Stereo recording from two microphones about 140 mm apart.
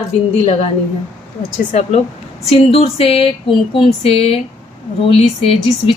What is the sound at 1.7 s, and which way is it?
A woman's voice, 55° left (ahead or behind).